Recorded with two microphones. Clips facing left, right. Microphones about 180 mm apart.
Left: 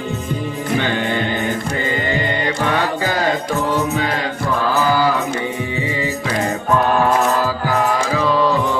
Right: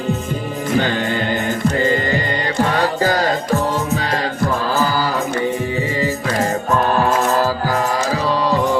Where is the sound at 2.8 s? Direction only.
40° right (ahead or behind).